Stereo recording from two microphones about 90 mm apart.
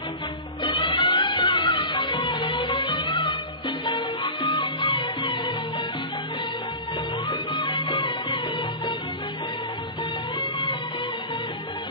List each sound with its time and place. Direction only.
0.7 s music: 60° left (ahead or behind)
7.2 s music: 60° left (ahead or behind)
10.4 s music: 60° left (ahead or behind)